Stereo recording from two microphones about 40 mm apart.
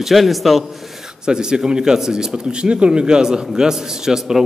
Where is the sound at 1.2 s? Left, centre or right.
Centre.